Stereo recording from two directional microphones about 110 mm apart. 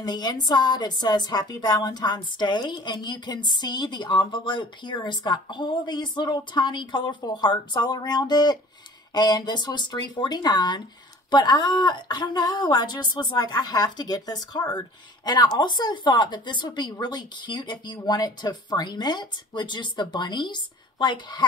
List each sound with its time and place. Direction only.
0.0 s a woman's voice: 40° left (ahead or behind)